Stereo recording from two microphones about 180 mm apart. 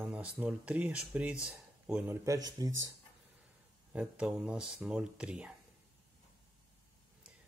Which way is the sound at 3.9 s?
5° right (ahead or behind).